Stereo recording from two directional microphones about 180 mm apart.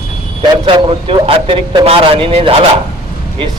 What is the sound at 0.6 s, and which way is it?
Speech, 30° right (ahead or behind).